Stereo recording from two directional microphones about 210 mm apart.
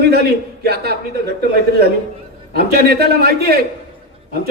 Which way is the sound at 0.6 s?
50° right (ahead or behind).